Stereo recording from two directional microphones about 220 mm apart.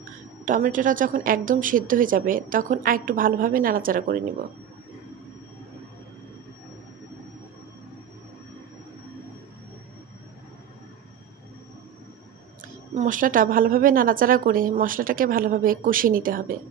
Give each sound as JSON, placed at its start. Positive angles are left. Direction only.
{"t": 0.4, "sound": "a woman's voice", "side_deg": -35}
{"t": 12.9, "sound": "a woman's voice", "side_deg": -35}